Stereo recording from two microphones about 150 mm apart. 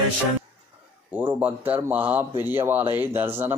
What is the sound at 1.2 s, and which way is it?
Speech, 10° right (ahead or behind).